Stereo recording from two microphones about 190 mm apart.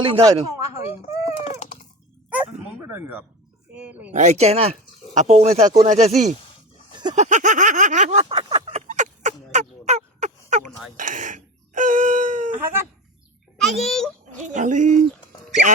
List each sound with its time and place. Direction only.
0.0 s speech: 25° right (ahead or behind)
1.4 s a sound: 30° left (ahead or behind)
2.3 s speech: 10° right (ahead or behind)
4.2 s speech: 35° right (ahead or behind)
6.9 s a sound: 20° right (ahead or behind)
7.2 s a sound: 40° right (ahead or behind)
10.9 s speech: 40° right (ahead or behind)
13.6 s a child's voice: centre (ahead or behind)
14.4 s speech: 40° right (ahead or behind)